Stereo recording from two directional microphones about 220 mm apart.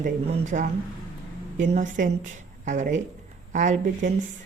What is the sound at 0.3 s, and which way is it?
Speech, 35° right (ahead or behind).